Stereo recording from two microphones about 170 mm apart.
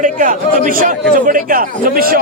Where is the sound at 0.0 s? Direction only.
50° right (ahead or behind).